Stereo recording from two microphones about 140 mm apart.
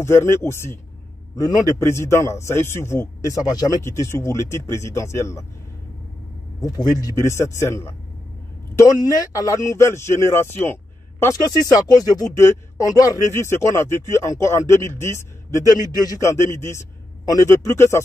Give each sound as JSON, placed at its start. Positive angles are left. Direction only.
{"t": 0.0, "sound": "speech", "side_deg": 20}
{"t": 6.6, "sound": "speech", "side_deg": 25}
{"t": 11.2, "sound": "speech", "side_deg": 25}